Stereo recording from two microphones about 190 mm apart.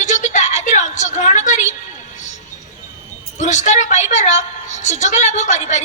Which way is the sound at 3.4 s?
40° left (ahead or behind).